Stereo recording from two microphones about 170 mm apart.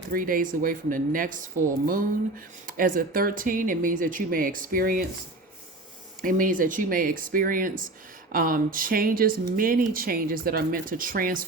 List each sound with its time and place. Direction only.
0.1 s speech: 55° right (ahead or behind)
2.6 s speech: 55° right (ahead or behind)
6.2 s speech: 55° right (ahead or behind)